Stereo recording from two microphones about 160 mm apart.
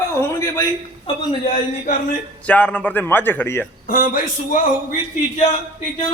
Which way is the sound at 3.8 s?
60° left (ahead or behind).